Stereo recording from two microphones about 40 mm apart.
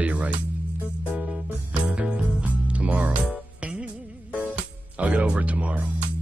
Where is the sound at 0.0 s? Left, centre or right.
Right.